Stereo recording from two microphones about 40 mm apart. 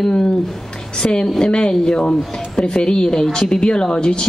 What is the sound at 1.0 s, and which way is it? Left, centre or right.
A woman's voice, left.